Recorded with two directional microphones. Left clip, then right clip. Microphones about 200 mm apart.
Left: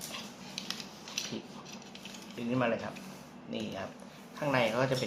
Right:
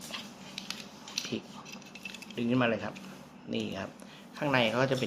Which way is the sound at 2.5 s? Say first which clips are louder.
Right 2 dB; 50° right (ahead or behind).